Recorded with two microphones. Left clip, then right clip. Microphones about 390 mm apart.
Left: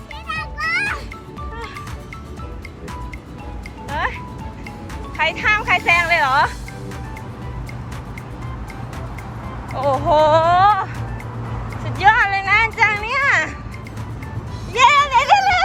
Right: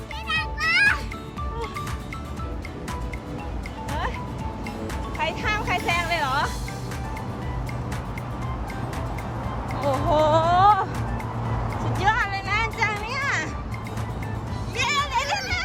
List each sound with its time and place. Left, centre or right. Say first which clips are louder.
0.3 s music: left 1 dB; centre
3.8 s music: left 7 dB; centre
5.1 s speech: left 9 dB; centre
9.9 s speech: left 6 dB; centre
11.9 s a sound: left 9 dB; centre
14.7 s a sound: left 11 dB; centre